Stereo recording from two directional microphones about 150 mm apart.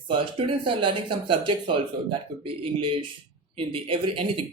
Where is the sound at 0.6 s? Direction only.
35° right (ahead or behind).